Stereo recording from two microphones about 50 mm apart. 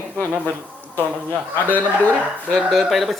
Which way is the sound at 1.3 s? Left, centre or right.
Left.